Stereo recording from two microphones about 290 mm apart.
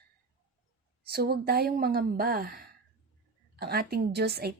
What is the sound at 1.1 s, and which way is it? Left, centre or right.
A woman's voice, right.